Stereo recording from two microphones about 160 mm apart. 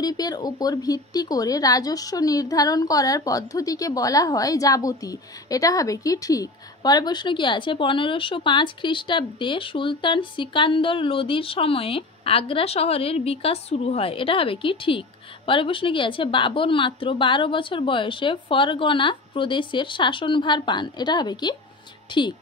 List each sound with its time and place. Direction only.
0.0 s a woman's voice: 25° left (ahead or behind)